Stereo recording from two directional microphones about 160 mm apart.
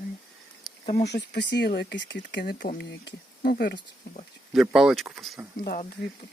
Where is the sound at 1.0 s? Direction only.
90° left.